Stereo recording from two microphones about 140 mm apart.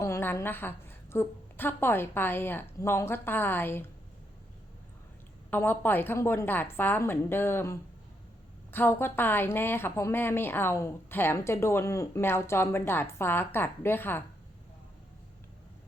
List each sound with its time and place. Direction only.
0.0 s a woman's voice: 20° left (ahead or behind)
5.5 s a woman's voice: 15° left (ahead or behind)